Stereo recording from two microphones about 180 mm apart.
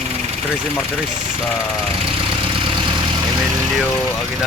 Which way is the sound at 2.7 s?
25° right (ahead or behind).